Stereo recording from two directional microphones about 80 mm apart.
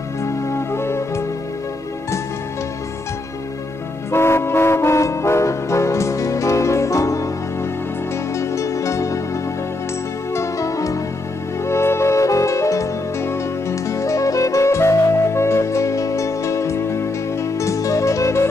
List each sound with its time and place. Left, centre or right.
0.2 s music: left
4.1 s music: left
8.4 s music: left
10.3 s music: left